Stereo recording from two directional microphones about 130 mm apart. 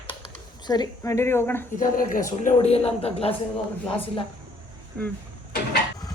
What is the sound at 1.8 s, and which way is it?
Speech, 85° left.